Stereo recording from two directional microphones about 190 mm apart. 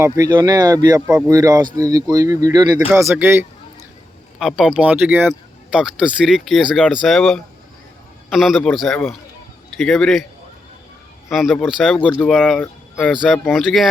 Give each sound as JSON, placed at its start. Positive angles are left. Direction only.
{"t": 0.0, "sound": "speech", "side_deg": -20}
{"t": 2.9, "sound": "speech", "side_deg": -10}
{"t": 4.4, "sound": "speech", "side_deg": 0}
{"t": 11.3, "sound": "speech", "side_deg": 0}